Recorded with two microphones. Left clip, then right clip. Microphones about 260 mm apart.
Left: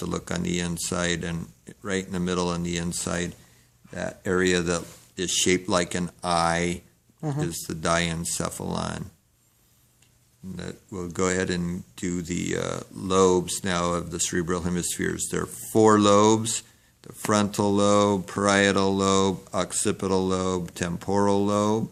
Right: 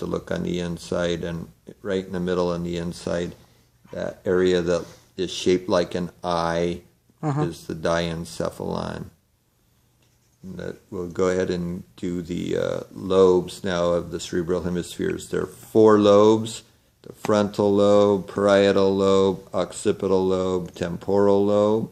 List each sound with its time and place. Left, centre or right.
0.0 s speech: left
7.2 s speech: centre
7.4 s speech: left
10.6 s speech: left